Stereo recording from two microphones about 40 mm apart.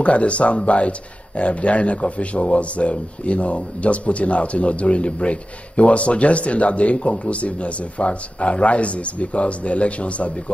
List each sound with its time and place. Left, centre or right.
0.0 s speech: left